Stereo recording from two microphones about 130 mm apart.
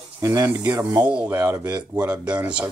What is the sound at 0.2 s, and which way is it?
Speech, 25° right (ahead or behind).